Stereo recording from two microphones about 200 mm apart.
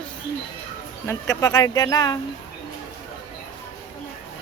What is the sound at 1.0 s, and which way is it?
Speech, 15° left (ahead or behind).